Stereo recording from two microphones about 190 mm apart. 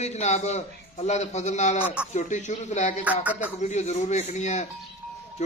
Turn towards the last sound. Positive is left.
turn(degrees=40)  # may be behind; listen again after turning